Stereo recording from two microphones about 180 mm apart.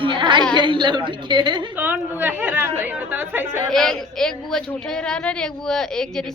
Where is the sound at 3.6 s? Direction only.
5° left (ahead or behind).